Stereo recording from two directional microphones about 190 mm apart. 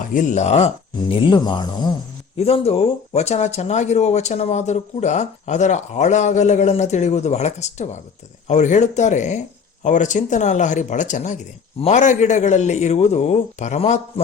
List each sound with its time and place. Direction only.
0.0 s speech: 45° left (ahead or behind)